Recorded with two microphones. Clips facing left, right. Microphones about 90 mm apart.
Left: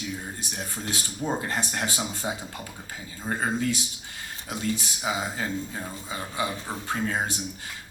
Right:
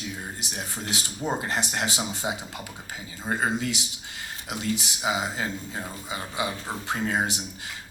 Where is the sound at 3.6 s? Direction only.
20° right (ahead or behind).